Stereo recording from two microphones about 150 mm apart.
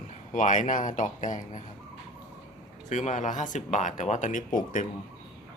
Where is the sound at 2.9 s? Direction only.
55° left (ahead or behind).